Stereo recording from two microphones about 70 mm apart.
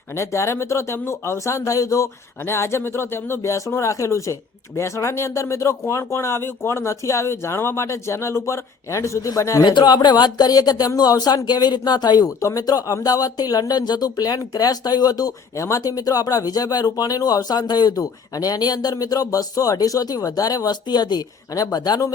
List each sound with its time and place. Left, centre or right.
0.2 s speech: left
2.5 s speech: left
9.6 s speech: left
11.4 s speech: left
12.4 s speech: left
15.5 s speech: left
21.5 s speech: left
21.8 s speech: left